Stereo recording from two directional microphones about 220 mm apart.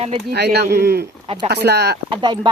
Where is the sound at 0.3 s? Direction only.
50° right (ahead or behind).